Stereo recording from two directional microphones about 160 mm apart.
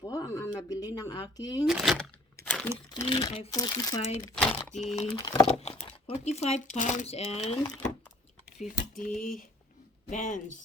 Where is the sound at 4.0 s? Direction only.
45° left (ahead or behind).